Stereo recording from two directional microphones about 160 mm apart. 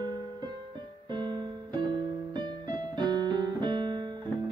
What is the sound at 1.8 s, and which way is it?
Piano, 30° right (ahead or behind).